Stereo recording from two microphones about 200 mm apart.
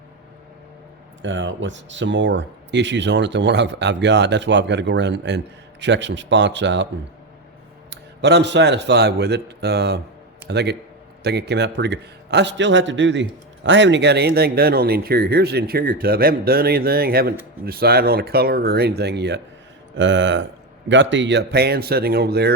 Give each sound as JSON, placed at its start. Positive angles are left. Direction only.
{"t": 1.2, "sound": "speech", "side_deg": -65}
{"t": 7.9, "sound": "speech", "side_deg": -60}